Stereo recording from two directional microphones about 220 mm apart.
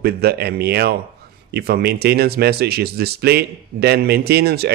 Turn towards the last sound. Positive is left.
turn(degrees=-45)  # may be behind; listen again after turning